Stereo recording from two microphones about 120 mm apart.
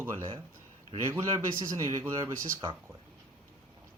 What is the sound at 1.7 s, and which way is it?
Speech, 25° right (ahead or behind).